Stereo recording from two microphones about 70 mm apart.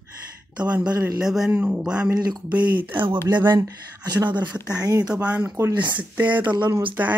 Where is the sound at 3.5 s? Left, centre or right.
Right.